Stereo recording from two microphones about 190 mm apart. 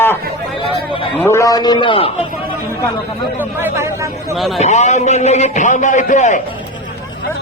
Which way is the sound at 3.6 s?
15° right (ahead or behind).